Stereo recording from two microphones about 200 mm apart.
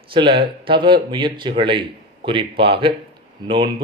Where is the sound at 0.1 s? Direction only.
25° right (ahead or behind).